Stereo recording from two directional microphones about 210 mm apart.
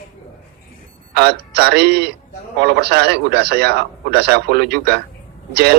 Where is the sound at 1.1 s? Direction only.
50° right (ahead or behind).